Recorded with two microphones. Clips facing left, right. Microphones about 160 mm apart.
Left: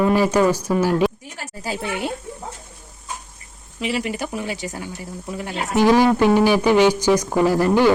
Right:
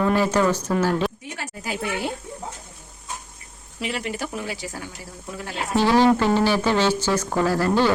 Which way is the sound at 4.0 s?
15° left (ahead or behind).